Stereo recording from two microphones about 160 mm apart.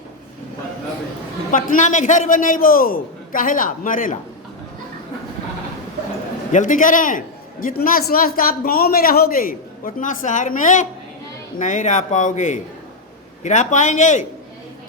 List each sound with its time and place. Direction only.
1.5 s a man's voice: 55° left (ahead or behind)
6.5 s a man's voice: 55° left (ahead or behind)